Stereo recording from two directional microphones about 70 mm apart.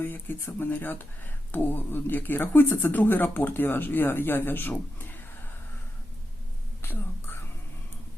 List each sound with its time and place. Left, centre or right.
0.0 s speech: left
6.8 s whispering: left